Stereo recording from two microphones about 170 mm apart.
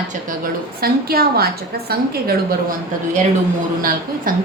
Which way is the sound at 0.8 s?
65° right (ahead or behind).